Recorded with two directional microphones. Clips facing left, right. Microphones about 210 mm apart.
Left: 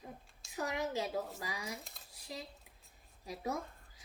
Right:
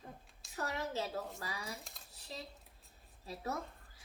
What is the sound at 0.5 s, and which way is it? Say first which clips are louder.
A woman's voice: left 2 dB; 15° left (ahead or behind).